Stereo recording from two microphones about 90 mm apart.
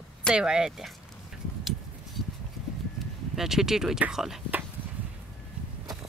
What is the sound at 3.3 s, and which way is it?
Speech, 5° right (ahead or behind).